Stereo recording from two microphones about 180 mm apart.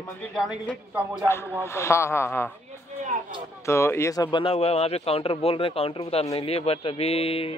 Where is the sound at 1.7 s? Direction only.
15° left (ahead or behind).